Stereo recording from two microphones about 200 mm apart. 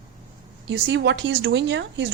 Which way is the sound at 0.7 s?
65° right (ahead or behind).